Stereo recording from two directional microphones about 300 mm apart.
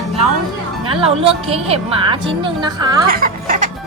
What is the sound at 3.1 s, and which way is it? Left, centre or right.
Music, right.